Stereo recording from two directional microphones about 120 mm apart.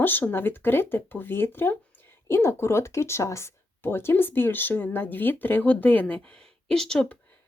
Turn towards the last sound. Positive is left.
turn(degrees=5)  # may be behind; listen again after turning